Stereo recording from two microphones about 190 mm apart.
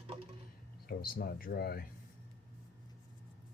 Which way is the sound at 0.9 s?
50° left (ahead or behind).